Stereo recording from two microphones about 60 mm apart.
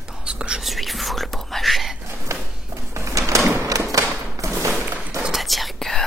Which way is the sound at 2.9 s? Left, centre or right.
Right.